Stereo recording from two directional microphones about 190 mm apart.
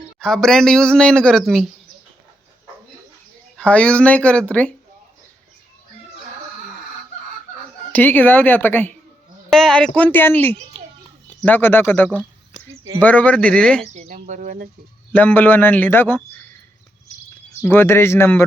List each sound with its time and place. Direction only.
0.2 s speech: 5° left (ahead or behind)
3.6 s speech: 5° left (ahead or behind)
7.9 s speech: 10° left (ahead or behind)
13.9 s speech: 40° right (ahead or behind)
15.1 s speech: 10° left (ahead or behind)
17.6 s speech: 10° left (ahead or behind)